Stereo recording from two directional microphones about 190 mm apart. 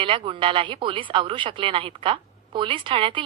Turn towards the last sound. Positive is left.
turn(degrees=-25)  # may be behind; listen again after turning